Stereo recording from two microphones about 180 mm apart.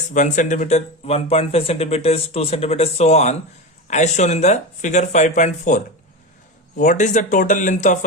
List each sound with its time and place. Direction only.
0.1 s speech: 45° left (ahead or behind)